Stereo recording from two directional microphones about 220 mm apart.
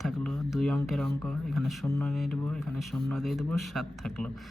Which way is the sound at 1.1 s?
5° left (ahead or behind).